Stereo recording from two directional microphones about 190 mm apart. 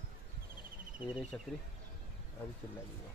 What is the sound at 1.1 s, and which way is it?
Speech, 5° right (ahead or behind).